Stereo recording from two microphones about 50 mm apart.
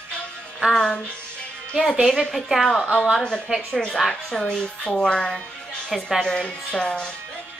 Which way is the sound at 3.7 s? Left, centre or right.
Centre.